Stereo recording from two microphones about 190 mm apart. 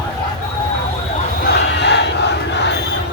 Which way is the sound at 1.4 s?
65° left (ahead or behind).